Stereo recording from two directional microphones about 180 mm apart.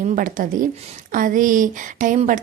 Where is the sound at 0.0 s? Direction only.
45° right (ahead or behind).